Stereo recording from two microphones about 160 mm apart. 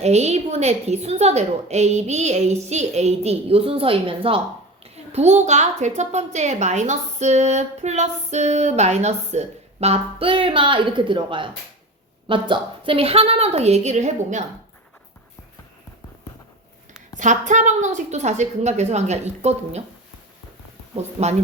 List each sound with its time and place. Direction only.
0.0 s a woman's voice: 45° right (ahead or behind)
17.2 s a woman's voice: 50° right (ahead or behind)
20.9 s a woman's voice: 45° right (ahead or behind)